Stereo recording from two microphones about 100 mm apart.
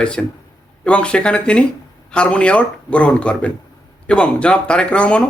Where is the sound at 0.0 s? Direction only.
10° left (ahead or behind).